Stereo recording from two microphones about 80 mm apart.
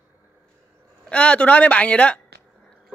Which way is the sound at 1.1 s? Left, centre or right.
Centre.